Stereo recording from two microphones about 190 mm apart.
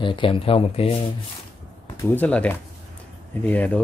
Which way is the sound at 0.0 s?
25° left (ahead or behind).